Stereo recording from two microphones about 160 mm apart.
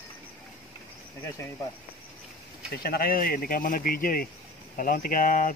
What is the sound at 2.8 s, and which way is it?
Speech, 70° left (ahead or behind).